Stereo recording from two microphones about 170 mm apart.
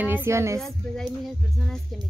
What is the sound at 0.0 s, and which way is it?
Speech, 15° right (ahead or behind).